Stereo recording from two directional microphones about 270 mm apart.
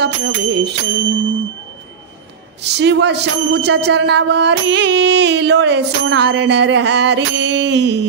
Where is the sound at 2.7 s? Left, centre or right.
Right.